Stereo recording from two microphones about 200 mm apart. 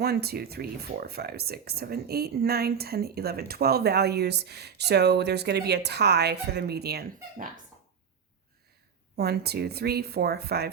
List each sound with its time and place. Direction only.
0.0 s speech: 55° right (ahead or behind)
9.1 s speech: 55° right (ahead or behind)